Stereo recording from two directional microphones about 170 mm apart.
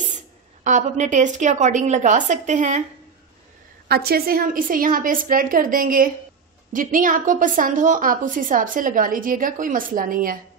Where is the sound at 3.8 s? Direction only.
65° right (ahead or behind).